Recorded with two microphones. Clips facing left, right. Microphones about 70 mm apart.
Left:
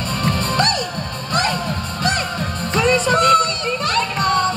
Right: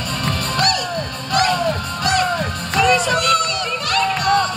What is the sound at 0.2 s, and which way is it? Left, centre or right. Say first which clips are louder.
Music: left 1 dB; left.